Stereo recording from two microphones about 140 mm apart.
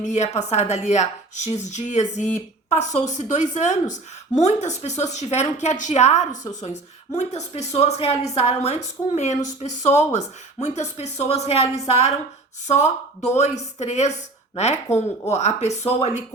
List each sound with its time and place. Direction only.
0.0 s speech: 55° left (ahead or behind)